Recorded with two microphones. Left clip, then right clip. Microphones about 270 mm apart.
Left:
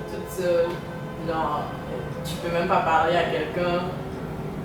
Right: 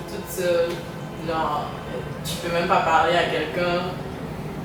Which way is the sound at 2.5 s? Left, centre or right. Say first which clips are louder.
Right 2 dB; centre.